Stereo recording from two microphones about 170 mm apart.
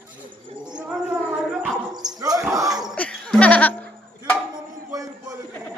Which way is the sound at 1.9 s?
20° right (ahead or behind).